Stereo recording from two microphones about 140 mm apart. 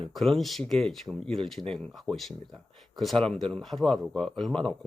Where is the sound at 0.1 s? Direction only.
Centre (ahead or behind).